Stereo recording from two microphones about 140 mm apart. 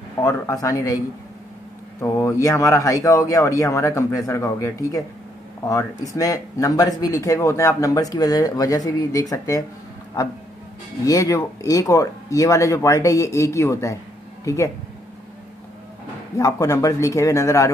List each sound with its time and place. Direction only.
0.2 s speech: 25° left (ahead or behind)
6.1 s speech: 25° left (ahead or behind)
11.1 s speech: 25° left (ahead or behind)
16.3 s speech: 25° left (ahead or behind)